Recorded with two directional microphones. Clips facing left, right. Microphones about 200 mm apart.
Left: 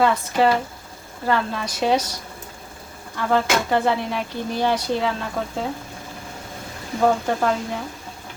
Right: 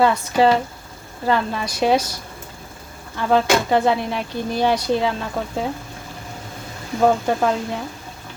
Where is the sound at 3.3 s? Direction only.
15° right (ahead or behind).